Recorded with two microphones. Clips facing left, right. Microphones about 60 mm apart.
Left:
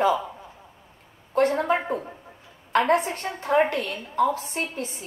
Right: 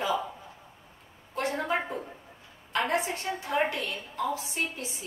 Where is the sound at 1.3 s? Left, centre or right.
Left.